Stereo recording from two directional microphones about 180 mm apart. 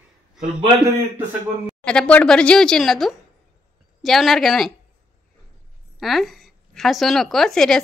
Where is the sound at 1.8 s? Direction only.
5° left (ahead or behind).